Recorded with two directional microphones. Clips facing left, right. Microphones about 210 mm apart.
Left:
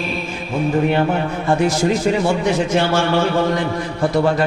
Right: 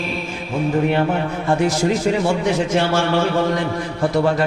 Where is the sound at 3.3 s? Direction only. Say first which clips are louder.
Left 1 dB; 30° left (ahead or behind).